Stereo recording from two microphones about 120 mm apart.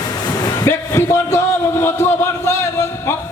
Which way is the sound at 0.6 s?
20° left (ahead or behind).